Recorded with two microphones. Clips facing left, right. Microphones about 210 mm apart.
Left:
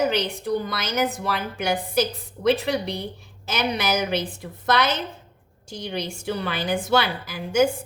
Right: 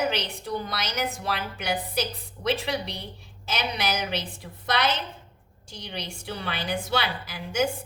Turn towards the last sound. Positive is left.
turn(degrees=50)  # may be behind; listen again after turning